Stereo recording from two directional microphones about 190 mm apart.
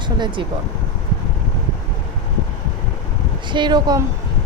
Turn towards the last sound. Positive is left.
turn(degrees=-20)  # may be behind; listen again after turning